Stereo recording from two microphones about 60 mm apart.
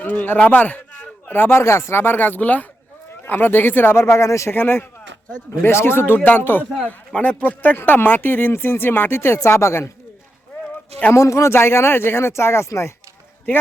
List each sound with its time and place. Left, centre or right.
0.0 s a man's voice: left
1.6 s speech: left
4.0 s speech: left
4.5 s speech: left
11.1 s speech: left